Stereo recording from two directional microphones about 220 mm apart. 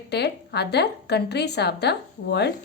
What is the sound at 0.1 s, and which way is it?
Speech, 50° left (ahead or behind).